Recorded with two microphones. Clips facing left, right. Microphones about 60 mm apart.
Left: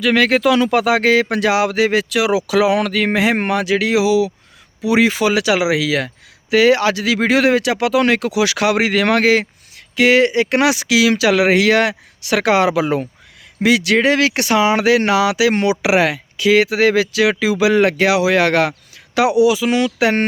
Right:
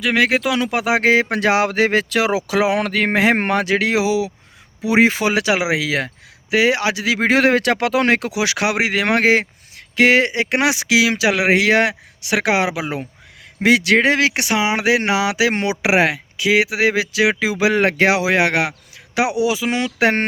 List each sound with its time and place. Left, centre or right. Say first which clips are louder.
0.0 s speech: left 3 dB; centre
13.6 s speech: even; right